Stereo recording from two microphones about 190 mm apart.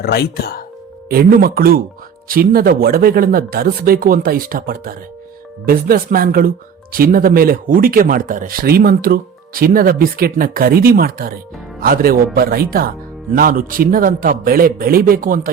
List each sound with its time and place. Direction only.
0.0 s speech: 55° left (ahead or behind)
1.1 s speech: 50° right (ahead or behind)